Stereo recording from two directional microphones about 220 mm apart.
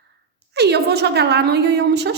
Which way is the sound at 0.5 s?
50° right (ahead or behind).